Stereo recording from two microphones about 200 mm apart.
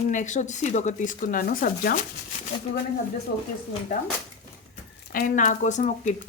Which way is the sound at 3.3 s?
50° left (ahead or behind).